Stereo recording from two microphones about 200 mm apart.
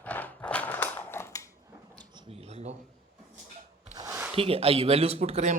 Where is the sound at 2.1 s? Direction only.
30° right (ahead or behind).